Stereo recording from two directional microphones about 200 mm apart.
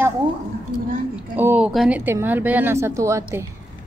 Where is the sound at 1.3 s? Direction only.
10° right (ahead or behind).